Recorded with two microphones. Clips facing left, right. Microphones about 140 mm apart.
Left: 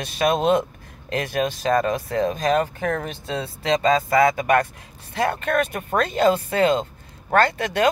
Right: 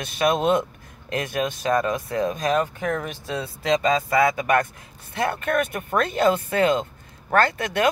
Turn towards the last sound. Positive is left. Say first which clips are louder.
# left 1 dB
turn(degrees=30)  # may be behind; listen again after turning